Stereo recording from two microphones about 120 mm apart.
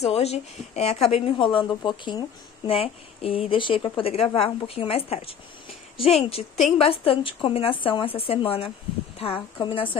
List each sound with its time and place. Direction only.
0.0 s a woman's voice: 60° left (ahead or behind)